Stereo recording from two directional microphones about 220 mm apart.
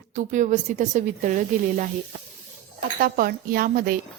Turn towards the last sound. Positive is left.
turn(degrees=-40)  # may be behind; listen again after turning